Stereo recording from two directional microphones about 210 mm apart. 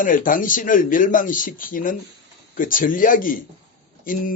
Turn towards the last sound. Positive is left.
turn(degrees=40)  # may be behind; listen again after turning